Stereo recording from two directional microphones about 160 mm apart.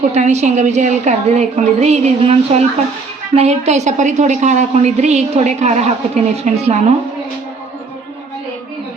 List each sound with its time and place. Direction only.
0.1 s a woman's voice: 45° right (ahead or behind)